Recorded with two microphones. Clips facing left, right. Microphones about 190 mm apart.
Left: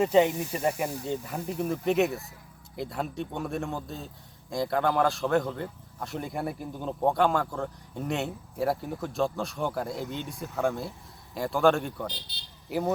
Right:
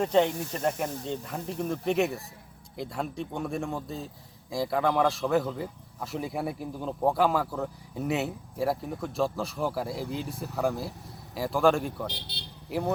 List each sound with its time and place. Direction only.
0.0 s speech: 5° left (ahead or behind)
12.1 s speech: 65° right (ahead or behind)
12.6 s speech: centre (ahead or behind)